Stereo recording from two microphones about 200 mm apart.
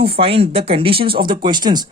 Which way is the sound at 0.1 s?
30° right (ahead or behind).